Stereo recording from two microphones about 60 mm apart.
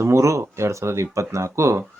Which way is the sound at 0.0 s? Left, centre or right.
Right.